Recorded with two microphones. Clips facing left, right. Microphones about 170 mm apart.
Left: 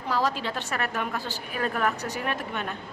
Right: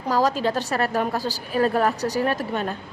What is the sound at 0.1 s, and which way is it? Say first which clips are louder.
A woman's voice: right 6 dB; 40° right (ahead or behind).